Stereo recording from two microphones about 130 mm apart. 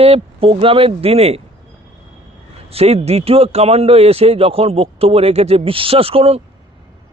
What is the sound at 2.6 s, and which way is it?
A man's voice, 50° right (ahead or behind).